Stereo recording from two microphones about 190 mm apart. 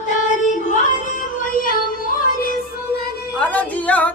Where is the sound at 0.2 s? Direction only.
40° left (ahead or behind).